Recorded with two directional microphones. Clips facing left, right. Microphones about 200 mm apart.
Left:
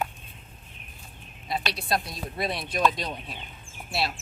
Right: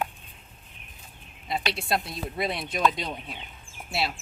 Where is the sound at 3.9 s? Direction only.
20° right (ahead or behind).